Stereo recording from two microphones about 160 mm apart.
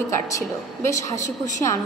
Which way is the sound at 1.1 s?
50° left (ahead or behind).